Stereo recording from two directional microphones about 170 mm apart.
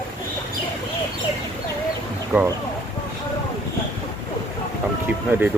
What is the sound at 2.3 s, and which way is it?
Speech, 10° right (ahead or behind).